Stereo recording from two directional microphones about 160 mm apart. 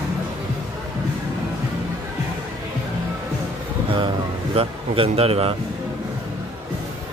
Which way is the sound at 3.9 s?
35° right (ahead or behind).